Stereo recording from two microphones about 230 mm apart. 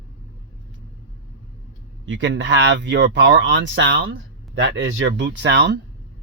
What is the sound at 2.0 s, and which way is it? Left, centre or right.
Speech, right.